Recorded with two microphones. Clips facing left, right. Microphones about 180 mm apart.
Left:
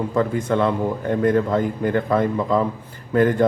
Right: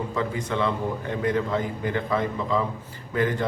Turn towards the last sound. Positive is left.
turn(degrees=50)  # may be behind; listen again after turning